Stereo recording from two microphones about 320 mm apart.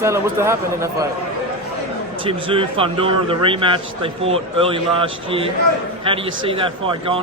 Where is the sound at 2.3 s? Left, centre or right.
Centre.